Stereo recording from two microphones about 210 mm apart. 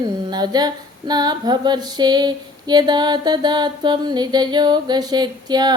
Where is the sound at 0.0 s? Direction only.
20° right (ahead or behind).